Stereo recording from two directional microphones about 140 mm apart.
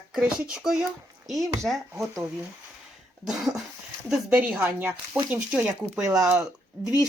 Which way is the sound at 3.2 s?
Centre (ahead or behind).